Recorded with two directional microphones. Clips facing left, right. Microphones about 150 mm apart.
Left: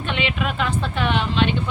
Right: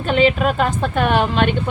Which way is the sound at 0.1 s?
40° right (ahead or behind).